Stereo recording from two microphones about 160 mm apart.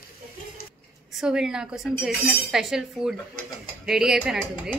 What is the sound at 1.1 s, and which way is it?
Speech, 5° right (ahead or behind).